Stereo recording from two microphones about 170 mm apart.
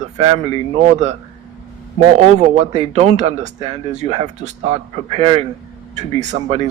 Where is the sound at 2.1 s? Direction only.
40° right (ahead or behind).